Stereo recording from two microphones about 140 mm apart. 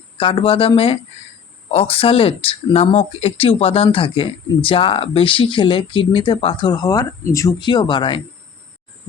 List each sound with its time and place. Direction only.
0.2 s speech: 40° left (ahead or behind); by 7.5 s 25° left (ahead or behind)
7.6 s speech: 35° left (ahead or behind)